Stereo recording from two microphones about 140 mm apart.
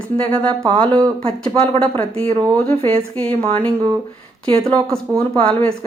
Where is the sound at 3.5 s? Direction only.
10° left (ahead or behind).